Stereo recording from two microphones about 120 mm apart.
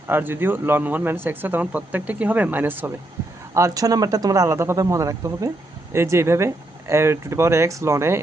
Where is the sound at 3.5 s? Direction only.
30° right (ahead or behind).